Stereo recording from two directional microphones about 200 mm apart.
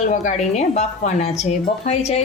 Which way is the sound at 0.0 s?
35° left (ahead or behind).